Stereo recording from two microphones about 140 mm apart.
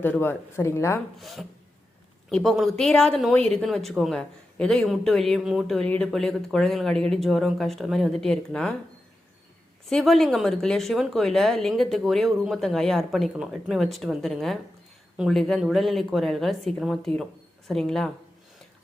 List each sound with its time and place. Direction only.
0.0 s speech: 15° left (ahead or behind)
1.2 s a woman's voice: centre (ahead or behind)
9.9 s a woman's voice: centre (ahead or behind)